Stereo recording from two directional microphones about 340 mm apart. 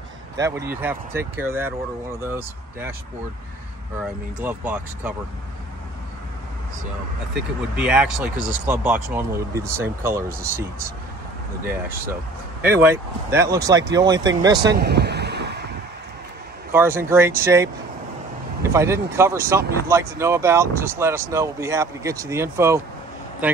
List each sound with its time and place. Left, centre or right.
0.4 s speech: centre
4.0 s speech: centre
7.7 s speech: centre
12.6 s speech: centre
14.7 s a sound: right
16.7 s speech: centre